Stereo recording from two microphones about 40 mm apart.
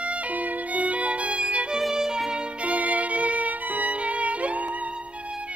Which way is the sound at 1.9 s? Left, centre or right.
Centre.